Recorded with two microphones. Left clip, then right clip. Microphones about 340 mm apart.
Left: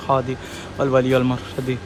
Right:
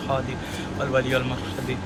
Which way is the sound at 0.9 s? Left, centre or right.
Centre.